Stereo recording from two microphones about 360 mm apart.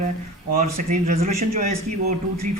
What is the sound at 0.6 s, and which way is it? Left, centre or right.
Speech, centre.